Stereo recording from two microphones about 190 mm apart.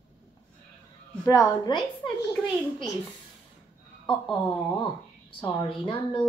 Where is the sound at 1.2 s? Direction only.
20° left (ahead or behind).